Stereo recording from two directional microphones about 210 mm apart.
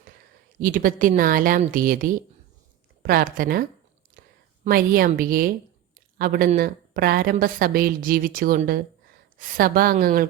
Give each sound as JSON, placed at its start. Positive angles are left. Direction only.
{"t": 0.6, "sound": "a woman's voice", "side_deg": -40}